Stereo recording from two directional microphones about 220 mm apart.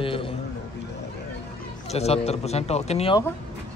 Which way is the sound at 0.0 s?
25° left (ahead or behind).